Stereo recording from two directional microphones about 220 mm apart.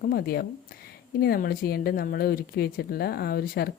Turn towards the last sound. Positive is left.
turn(degrees=45)  # may be behind; listen again after turning